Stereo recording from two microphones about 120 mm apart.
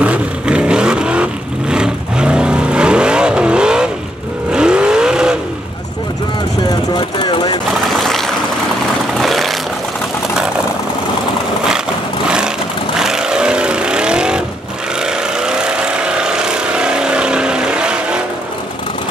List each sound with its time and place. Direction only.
0.0 s vehicle: 10° right (ahead or behind)
6.9 s vehicle: 40° left (ahead or behind)
7.9 s water: centre (ahead or behind)
9.2 s vehicle: centre (ahead or behind)
12.9 s vehicle: 5° right (ahead or behind)
15.4 s vehicle: 5° right (ahead or behind)